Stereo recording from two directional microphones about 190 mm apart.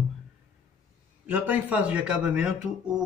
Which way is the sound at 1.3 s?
10° right (ahead or behind).